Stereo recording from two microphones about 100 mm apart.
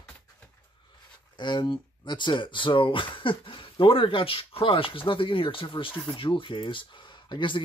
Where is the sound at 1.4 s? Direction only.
50° left (ahead or behind).